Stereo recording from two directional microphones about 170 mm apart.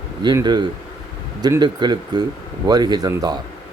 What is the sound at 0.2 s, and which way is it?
Speech, 25° right (ahead or behind).